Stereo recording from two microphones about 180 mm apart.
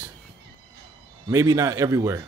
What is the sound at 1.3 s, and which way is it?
Speech, 20° right (ahead or behind).